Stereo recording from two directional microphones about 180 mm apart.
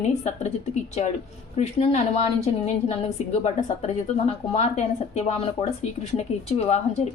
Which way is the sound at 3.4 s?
35° left (ahead or behind).